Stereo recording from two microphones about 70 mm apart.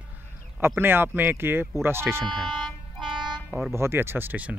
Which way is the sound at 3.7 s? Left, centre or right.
Right.